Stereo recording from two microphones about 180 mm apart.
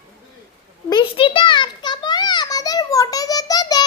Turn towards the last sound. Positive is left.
turn(degrees=20)  # may be behind; listen again after turning